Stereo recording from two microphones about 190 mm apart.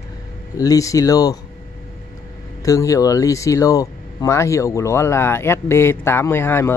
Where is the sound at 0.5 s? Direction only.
20° left (ahead or behind).